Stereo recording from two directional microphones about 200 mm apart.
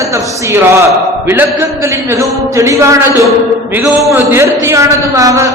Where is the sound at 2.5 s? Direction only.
15° right (ahead or behind).